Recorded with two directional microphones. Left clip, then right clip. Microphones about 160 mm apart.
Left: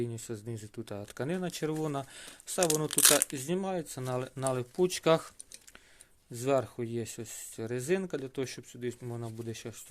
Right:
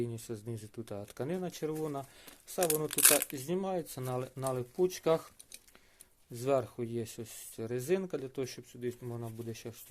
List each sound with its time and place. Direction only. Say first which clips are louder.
0.0 s speech: left 1 dB; 20° left (ahead or behind); by 2.6 s 35° left (ahead or behind)
2.9 s speech: left 3 dB; 10° left (ahead or behind)
3.3 s speech: left 1 dB; 25° left (ahead or behind)
4.4 s speech: left 2 dB; 35° left (ahead or behind)
6.3 s speech: left 2 dB; 20° left (ahead or behind)